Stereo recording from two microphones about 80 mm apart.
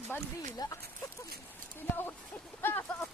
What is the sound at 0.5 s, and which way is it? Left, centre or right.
Speech, left.